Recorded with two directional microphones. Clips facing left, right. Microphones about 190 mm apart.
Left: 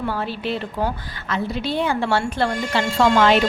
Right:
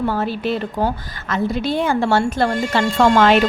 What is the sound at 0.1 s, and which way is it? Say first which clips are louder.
A woman's voice: right 4 dB; 45° right (ahead or behind).